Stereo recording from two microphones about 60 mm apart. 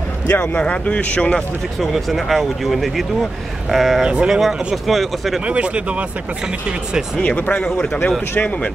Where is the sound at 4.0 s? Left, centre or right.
Centre.